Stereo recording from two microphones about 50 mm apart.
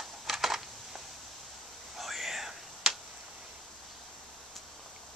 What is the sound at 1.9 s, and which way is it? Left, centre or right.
Whispering, centre.